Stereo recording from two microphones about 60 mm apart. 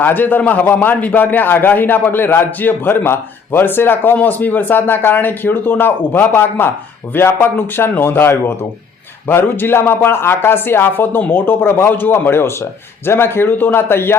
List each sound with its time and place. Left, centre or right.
0.0 s a man's voice: left